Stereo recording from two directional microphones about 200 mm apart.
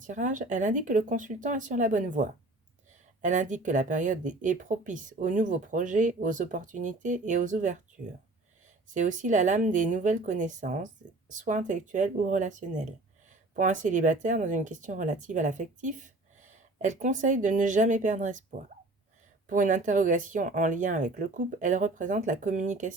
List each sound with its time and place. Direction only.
0.0 s speech: 40° right (ahead or behind)
8.9 s speech: 40° right (ahead or behind)